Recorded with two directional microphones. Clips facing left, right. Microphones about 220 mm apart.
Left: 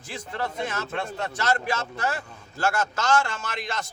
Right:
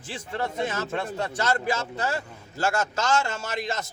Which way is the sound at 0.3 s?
25° right (ahead or behind).